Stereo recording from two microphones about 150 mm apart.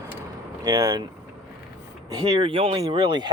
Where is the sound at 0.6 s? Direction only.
20° right (ahead or behind).